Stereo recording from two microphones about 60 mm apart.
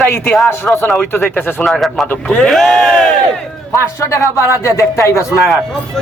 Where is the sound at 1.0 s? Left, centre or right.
Left.